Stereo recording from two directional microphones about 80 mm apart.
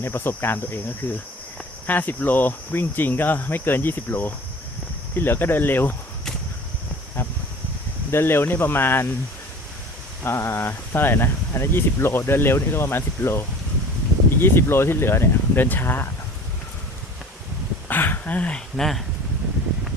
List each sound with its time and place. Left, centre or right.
0.0 s speech: left
7.2 s a sound: left
8.1 s speech: left
10.2 s speech: left
14.4 s speech: left
17.8 s speech: left; by 19.0 s centre